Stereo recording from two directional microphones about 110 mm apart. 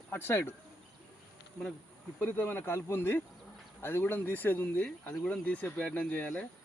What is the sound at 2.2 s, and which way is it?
Speech, 20° left (ahead or behind).